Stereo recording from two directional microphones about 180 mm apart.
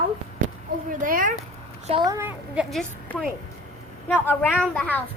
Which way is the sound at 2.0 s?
15° right (ahead or behind).